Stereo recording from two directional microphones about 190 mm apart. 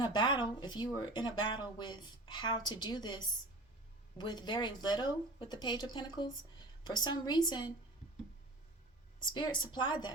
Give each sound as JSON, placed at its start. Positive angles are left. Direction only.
{"t": 0.0, "sound": "a woman's voice", "side_deg": 25}
{"t": 9.3, "sound": "a woman's voice", "side_deg": 25}